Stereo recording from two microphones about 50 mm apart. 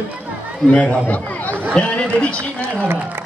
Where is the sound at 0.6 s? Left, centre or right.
Centre.